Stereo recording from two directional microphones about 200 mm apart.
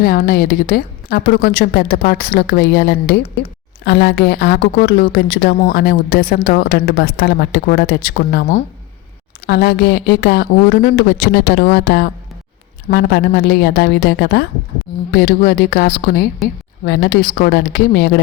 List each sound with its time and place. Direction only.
0.0 s a woman's voice: 50° left (ahead or behind)
9.5 s a woman's voice: 55° left (ahead or behind)
15.4 s a woman's voice: 45° left (ahead or behind)